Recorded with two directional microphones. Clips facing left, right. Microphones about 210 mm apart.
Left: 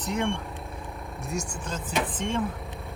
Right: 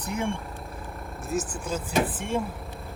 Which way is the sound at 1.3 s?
5° right (ahead or behind).